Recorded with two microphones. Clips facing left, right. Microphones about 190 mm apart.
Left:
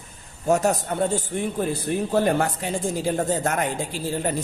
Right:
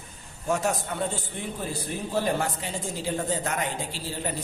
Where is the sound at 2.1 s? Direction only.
55° left (ahead or behind).